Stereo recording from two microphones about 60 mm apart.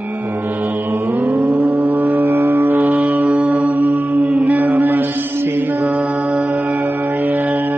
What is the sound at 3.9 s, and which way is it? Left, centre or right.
Mantra, right.